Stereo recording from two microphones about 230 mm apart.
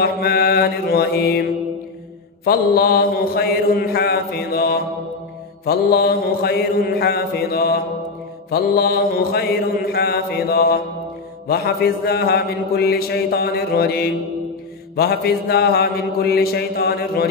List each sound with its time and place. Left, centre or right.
0.0 s a man's voice: left
2.4 s mantra: left
5.7 s a man's voice: left